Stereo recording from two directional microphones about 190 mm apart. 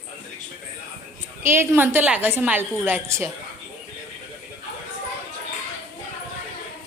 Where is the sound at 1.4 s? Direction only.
10° right (ahead or behind).